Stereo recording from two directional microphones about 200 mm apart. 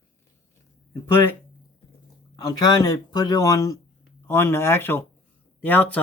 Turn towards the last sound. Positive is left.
turn(degrees=10)  # may be behind; listen again after turning